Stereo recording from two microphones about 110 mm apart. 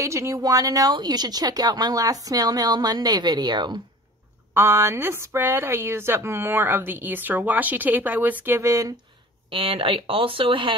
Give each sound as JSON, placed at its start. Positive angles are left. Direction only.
{"t": 0.0, "sound": "speech", "side_deg": -30}
{"t": 4.6, "sound": "speech", "side_deg": -20}
{"t": 8.5, "sound": "speech", "side_deg": -25}
{"t": 9.5, "sound": "speech", "side_deg": -55}